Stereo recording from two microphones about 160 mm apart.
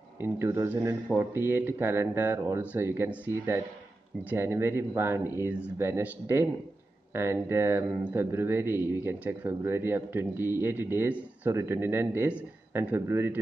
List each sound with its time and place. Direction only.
0.2 s a man's voice: 15° right (ahead or behind)